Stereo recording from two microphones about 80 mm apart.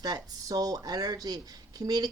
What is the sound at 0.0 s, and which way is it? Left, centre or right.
A woman's voice, right.